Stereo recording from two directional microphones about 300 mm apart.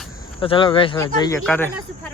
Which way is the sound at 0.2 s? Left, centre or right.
Centre.